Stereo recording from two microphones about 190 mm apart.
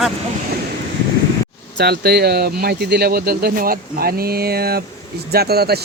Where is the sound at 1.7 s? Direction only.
60° right (ahead or behind).